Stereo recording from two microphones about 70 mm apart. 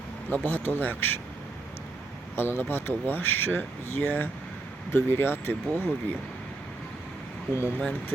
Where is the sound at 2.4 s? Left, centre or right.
Left.